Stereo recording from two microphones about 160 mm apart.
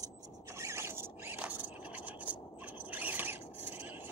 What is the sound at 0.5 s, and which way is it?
Zipper, 15° right (ahead or behind).